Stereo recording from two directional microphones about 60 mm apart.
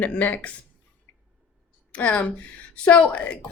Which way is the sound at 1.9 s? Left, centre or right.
Left.